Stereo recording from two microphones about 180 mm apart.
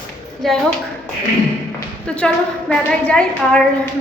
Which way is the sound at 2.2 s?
5° left (ahead or behind).